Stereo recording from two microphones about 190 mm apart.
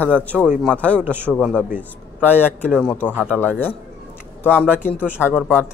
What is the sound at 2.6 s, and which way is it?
Speech, centre (ahead or behind).